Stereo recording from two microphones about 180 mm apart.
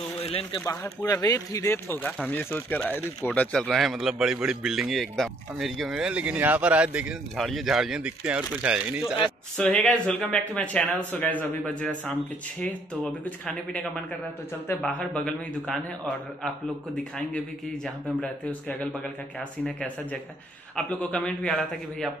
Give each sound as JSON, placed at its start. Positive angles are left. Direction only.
{"t": 0.2, "sound": "a man's voice", "side_deg": 35}
{"t": 0.7, "sound": "speech", "side_deg": 15}
{"t": 13.2, "sound": "speech", "side_deg": 5}